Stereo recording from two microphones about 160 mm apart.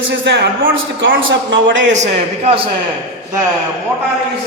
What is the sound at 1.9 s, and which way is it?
Speech, 45° right (ahead or behind).